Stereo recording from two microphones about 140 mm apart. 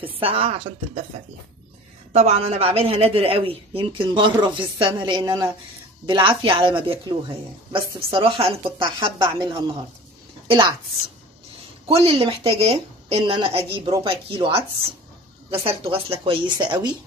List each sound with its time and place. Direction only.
0.0 s a woman's voice: 40° right (ahead or behind)
2.1 s speech: 50° right (ahead or behind)
11.9 s a woman's voice: 45° right (ahead or behind)
15.6 s speech: 40° right (ahead or behind)